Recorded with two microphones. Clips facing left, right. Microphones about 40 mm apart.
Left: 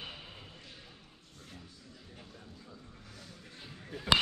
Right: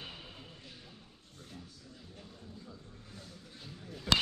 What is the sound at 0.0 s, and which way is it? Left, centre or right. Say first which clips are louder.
Basketball bounce: left 2 dB; centre.